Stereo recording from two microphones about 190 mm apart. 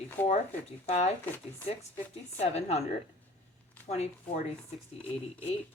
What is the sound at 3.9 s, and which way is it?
Speech, 35° left (ahead or behind).